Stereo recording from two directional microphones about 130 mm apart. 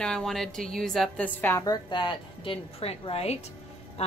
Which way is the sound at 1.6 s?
35° left (ahead or behind).